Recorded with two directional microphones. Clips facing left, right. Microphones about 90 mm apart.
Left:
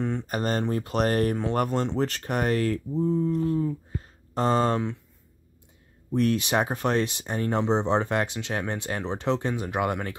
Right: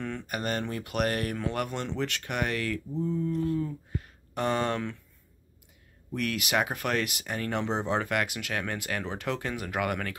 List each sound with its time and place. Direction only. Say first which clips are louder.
0.0 s speech: left 5 dB; 30° left (ahead or behind)
6.1 s speech: left 5 dB; 30° left (ahead or behind)